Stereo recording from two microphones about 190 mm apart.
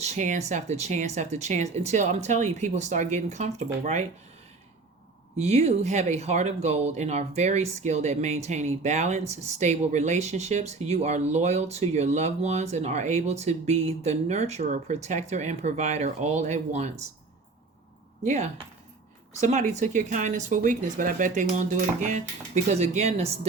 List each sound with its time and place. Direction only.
0.0 s speech: 40° right (ahead or behind)
5.4 s speech: 35° right (ahead or behind)
18.2 s speech: 40° right (ahead or behind)
19.5 s speech: 40° right (ahead or behind)